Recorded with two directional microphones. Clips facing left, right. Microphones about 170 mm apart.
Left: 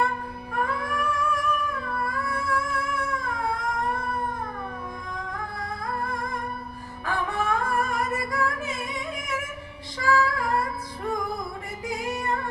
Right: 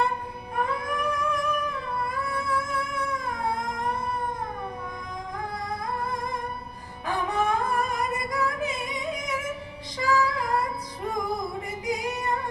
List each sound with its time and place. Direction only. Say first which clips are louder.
0.6 s a sound: even; 20° right (ahead or behind)
5.1 s music: right 2 dB; 20° right (ahead or behind)
11.9 s female singing: even; 20° right (ahead or behind)